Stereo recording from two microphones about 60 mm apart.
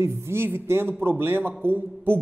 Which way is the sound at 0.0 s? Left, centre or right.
Right.